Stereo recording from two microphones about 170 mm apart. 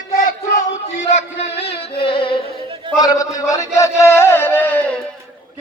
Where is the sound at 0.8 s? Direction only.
40° left (ahead or behind).